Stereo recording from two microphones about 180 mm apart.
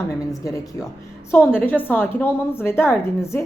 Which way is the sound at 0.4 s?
15° left (ahead or behind).